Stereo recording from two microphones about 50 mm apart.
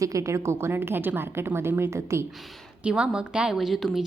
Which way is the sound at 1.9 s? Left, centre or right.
Right.